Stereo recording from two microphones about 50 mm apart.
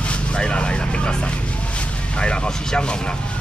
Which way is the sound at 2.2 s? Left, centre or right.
Centre.